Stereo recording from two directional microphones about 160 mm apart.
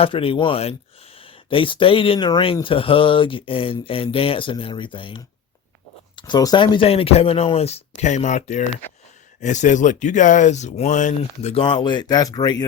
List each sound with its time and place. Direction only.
0.0 s speech: 35° left (ahead or behind)
6.8 s speech: 40° left (ahead or behind)
11.5 s speech: 30° left (ahead or behind)